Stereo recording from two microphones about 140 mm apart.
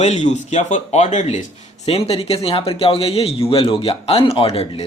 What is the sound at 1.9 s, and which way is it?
Speech, 45° left (ahead or behind).